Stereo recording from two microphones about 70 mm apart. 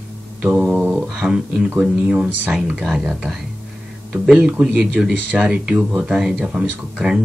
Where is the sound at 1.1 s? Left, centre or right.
Centre.